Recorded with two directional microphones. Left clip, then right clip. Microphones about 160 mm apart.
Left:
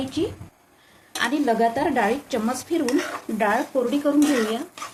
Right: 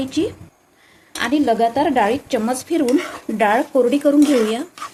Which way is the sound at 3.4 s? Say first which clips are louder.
Right 7 dB; 55° right (ahead or behind).